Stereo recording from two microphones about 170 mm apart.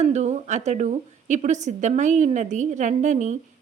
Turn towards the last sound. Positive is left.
turn(degrees=-45)  # may be behind; listen again after turning